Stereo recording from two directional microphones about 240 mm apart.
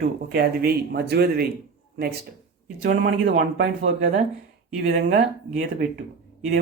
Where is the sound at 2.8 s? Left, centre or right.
Right.